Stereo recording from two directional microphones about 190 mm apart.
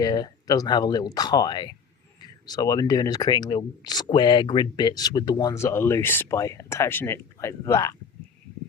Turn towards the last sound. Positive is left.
turn(degrees=15)  # may be behind; listen again after turning